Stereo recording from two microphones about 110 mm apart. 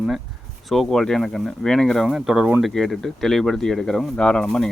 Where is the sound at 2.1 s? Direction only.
5° right (ahead or behind).